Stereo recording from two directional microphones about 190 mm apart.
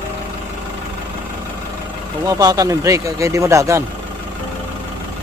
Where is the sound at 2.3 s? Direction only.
20° right (ahead or behind).